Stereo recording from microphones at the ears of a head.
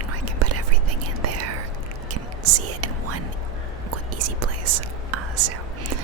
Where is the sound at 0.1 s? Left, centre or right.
Right.